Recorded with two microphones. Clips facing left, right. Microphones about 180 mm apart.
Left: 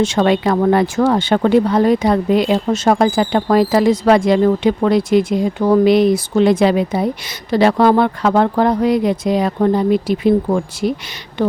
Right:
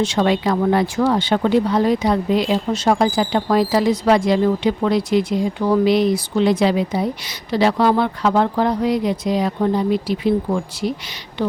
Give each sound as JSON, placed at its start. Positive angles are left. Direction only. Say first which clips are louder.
{"t": 0.0, "sound": "speech", "louder": "left 3 dB", "side_deg": 55}